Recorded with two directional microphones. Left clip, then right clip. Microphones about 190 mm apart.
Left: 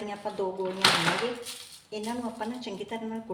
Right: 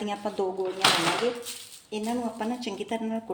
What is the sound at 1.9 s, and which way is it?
A woman's voice, 45° right (ahead or behind).